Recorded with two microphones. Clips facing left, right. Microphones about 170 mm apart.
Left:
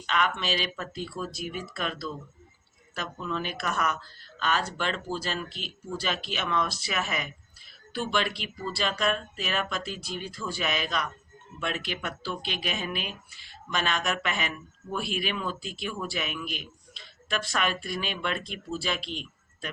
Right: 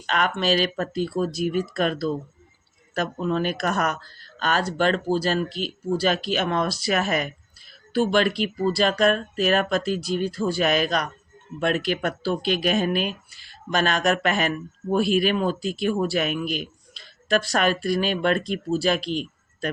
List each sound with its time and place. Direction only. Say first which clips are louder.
0.0 s speech: right 5 dB; 45° right (ahead or behind)